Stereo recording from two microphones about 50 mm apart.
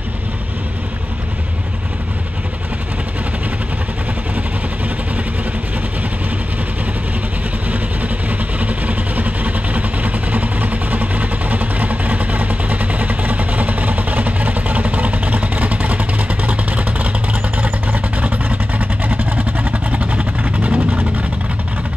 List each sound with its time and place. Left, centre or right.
7.7 s vehicle: right